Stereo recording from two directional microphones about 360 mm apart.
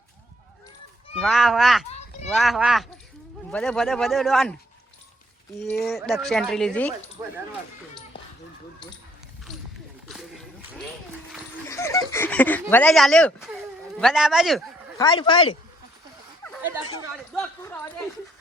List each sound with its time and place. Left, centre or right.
1.2 s speech: centre
1.9 s a sound: centre
2.3 s speech: centre
5.8 s speech: centre
7.2 s speech: centre
11.3 s a sound: centre
12.7 s speech: centre
15.0 s speech: centre
17.3 s speech: centre